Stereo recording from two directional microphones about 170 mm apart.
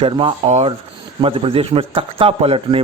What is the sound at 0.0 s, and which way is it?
A man's voice, 30° right (ahead or behind).